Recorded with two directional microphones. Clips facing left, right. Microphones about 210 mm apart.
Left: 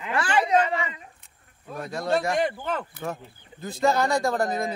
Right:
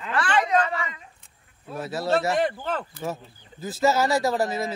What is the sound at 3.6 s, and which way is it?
Speech, 5° right (ahead or behind).